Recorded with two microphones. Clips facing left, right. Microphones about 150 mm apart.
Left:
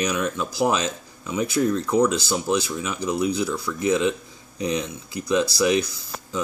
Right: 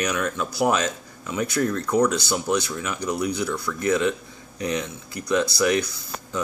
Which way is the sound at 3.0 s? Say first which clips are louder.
Left 3 dB; 25° left (ahead or behind).